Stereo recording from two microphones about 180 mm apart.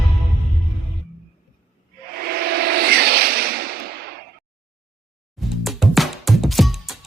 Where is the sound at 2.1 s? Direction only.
60° right (ahead or behind).